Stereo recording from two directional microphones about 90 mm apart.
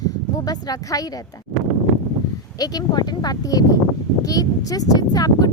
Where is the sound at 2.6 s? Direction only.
45° left (ahead or behind).